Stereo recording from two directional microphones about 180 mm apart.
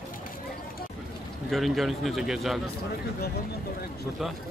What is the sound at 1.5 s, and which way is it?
A man's voice, centre (ahead or behind).